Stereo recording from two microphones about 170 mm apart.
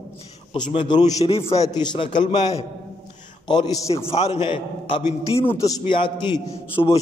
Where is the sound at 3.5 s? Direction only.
25° left (ahead or behind).